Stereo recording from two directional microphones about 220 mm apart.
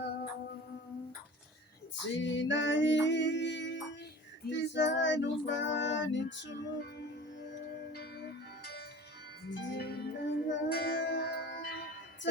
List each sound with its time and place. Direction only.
2.0 s a sound: 55° left (ahead or behind)
4.4 s female singing: 55° left (ahead or behind)
7.9 s music: 50° left (ahead or behind)